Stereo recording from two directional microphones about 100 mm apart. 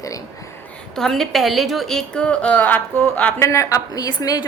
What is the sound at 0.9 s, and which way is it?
A woman's voice, 5° left (ahead or behind).